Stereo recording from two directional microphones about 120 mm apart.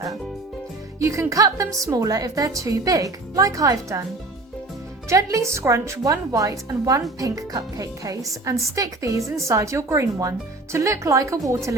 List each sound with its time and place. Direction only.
0.9 s speech: 25° right (ahead or behind)
5.0 s speech: 25° right (ahead or behind)